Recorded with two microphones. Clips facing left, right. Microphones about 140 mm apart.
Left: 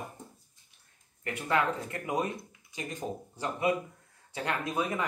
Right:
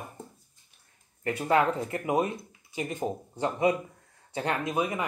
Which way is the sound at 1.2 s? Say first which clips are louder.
Right 5 dB; 30° right (ahead or behind).